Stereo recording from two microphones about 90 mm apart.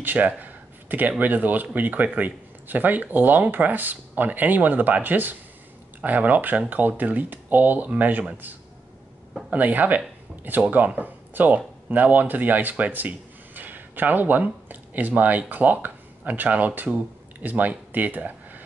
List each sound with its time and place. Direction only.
0.0 s speech: 15° right (ahead or behind)